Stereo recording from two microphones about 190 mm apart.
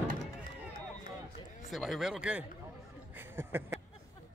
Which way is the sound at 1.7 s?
Centre (ahead or behind).